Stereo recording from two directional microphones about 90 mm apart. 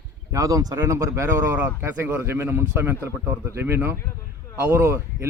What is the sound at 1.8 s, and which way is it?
A man's voice, 25° right (ahead or behind).